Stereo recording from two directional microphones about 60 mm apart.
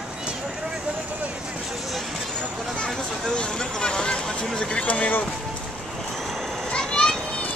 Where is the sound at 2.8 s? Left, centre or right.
Centre; by 5.3 s left.